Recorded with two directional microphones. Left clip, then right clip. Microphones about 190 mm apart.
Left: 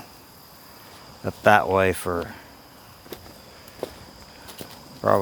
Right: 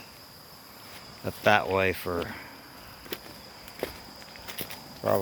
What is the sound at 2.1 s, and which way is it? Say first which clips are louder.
Speech: left 3 dB; 5° right (ahead or behind).